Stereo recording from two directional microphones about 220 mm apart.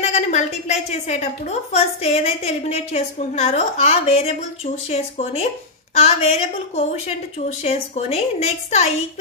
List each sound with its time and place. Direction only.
0.0 s a woman's voice: 30° left (ahead or behind)